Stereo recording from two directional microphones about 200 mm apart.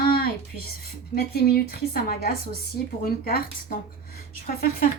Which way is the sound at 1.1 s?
50° left (ahead or behind).